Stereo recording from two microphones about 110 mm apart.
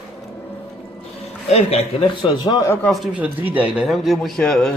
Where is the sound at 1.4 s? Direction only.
70° left (ahead or behind).